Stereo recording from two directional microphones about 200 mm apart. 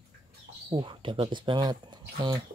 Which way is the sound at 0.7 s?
25° right (ahead or behind).